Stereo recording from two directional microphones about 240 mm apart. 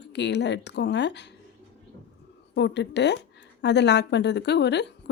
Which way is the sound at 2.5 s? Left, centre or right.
Left.